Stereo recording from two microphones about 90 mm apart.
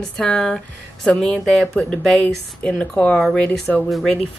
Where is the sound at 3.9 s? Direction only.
Centre (ahead or behind).